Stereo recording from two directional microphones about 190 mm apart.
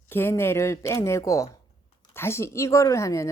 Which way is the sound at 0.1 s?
10° left (ahead or behind).